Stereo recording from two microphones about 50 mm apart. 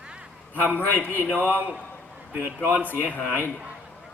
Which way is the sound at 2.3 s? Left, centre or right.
Right.